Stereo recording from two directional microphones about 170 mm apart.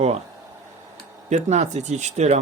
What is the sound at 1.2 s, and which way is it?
Speech, 40° right (ahead or behind).